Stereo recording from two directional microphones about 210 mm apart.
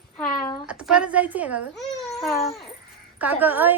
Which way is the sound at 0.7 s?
5° right (ahead or behind).